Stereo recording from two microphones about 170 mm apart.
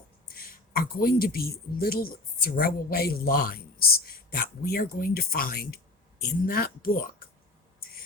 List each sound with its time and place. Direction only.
0.3 s speech: 60° left (ahead or behind)